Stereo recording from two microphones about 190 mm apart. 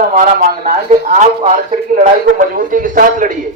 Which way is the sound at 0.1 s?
45° right (ahead or behind).